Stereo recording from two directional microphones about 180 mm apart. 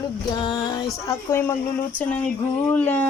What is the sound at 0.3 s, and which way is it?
Music, 25° left (ahead or behind).